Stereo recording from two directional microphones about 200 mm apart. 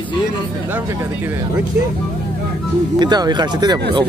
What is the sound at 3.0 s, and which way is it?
Speech, 20° right (ahead or behind).